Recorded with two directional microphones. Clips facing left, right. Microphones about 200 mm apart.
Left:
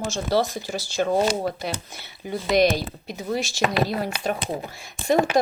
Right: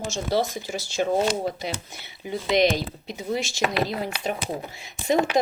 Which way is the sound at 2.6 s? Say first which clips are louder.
Left 2 dB; 20° right (ahead or behind).